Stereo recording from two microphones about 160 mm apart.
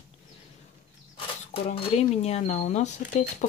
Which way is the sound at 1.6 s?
40° left (ahead or behind).